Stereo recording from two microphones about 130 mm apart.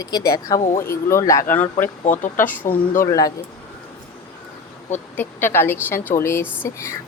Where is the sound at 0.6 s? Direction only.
70° left (ahead or behind).